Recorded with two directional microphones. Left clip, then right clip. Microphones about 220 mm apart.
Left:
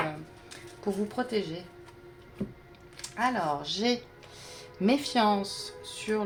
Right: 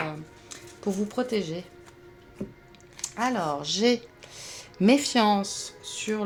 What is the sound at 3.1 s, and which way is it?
Speech, 45° right (ahead or behind).